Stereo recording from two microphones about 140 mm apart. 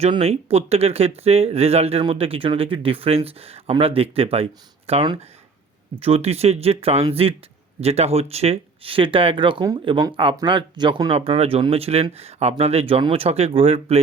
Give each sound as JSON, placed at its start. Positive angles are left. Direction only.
{"t": 0.1, "sound": "speech", "side_deg": -45}